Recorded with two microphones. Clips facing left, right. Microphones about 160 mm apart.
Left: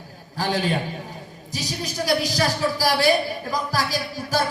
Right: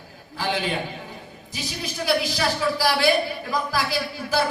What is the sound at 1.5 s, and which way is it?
Speech, 40° left (ahead or behind).